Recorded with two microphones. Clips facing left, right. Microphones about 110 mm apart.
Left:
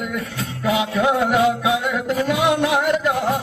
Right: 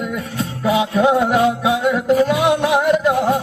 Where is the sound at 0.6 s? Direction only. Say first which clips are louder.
Right 3 dB; 20° right (ahead or behind).